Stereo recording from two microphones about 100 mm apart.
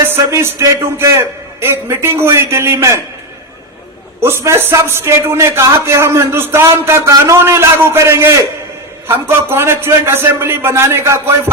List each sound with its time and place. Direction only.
0.0 s a man's voice: 25° right (ahead or behind)
4.2 s a man's voice: 25° right (ahead or behind)